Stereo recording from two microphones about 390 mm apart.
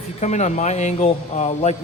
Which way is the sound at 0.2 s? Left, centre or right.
Centre.